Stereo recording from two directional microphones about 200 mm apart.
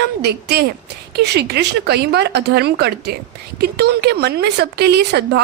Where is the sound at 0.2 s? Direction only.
55° right (ahead or behind).